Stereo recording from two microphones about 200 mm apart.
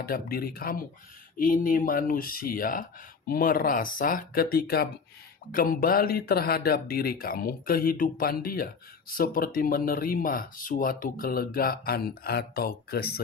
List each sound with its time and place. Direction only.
0.0 s speech: 50° left (ahead or behind)